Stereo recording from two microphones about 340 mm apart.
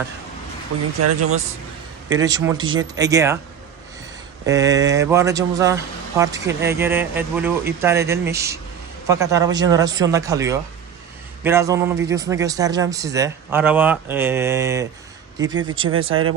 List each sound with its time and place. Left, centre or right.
1.0 s speech: right
2.0 s speech: centre
4.4 s speech: centre